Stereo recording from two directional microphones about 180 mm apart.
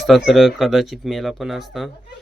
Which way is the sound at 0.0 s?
Centre (ahead or behind).